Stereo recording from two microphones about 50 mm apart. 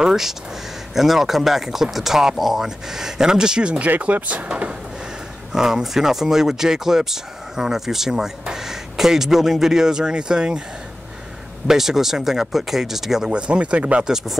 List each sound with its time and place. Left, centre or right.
0.0 s speech: centre
5.5 s speech: centre
11.6 s speech: centre
13.3 s speech: right
14.0 s speech: centre